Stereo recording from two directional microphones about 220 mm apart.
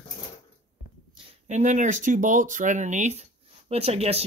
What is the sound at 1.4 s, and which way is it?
Speech, 35° right (ahead or behind).